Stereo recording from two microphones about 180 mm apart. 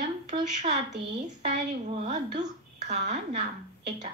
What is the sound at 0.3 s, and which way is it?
A woman's voice, 40° right (ahead or behind).